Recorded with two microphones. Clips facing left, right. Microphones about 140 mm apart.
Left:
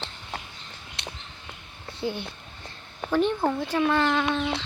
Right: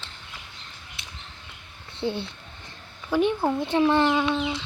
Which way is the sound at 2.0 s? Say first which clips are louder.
Right 2 dB; 30° right (ahead or behind).